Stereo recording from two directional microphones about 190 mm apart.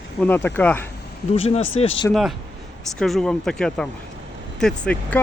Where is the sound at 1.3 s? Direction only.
35° left (ahead or behind).